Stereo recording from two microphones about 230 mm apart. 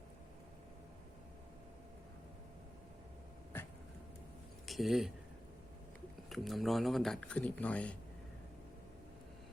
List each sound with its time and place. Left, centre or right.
4.6 s speech: centre
6.2 s speech: centre